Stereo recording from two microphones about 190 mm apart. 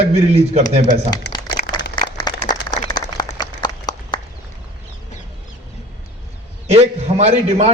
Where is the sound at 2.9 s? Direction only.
20° left (ahead or behind).